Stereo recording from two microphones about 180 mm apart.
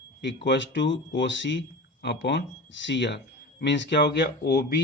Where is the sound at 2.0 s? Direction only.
75° left (ahead or behind).